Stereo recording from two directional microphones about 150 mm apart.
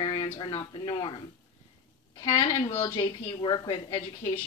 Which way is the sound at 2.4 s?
35° left (ahead or behind).